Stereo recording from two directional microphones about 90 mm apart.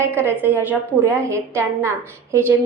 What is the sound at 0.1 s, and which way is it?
A woman's voice, 25° right (ahead or behind).